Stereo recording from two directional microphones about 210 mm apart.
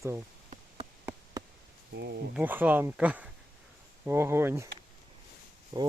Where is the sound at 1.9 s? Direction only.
50° right (ahead or behind).